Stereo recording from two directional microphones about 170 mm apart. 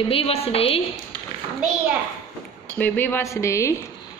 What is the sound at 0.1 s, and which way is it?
Speech, 35° left (ahead or behind).